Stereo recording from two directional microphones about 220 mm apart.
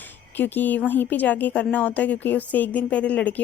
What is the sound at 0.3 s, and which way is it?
A woman's voice, 10° left (ahead or behind).